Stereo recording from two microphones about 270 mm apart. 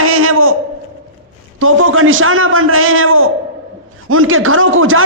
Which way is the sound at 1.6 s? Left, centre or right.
Right.